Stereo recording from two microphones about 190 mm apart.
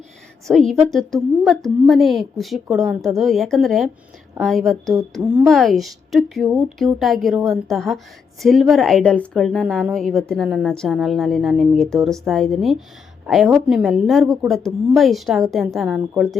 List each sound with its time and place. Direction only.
0.4 s a woman's voice: centre (ahead or behind)